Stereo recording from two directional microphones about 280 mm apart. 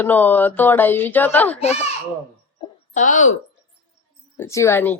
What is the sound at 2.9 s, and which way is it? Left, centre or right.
Speech, left.